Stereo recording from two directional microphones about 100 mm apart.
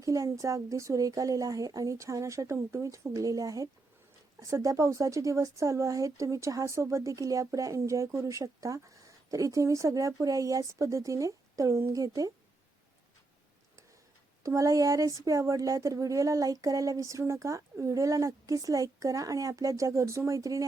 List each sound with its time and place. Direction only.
0.0 s speech: 30° right (ahead or behind)
14.4 s speech: 35° right (ahead or behind)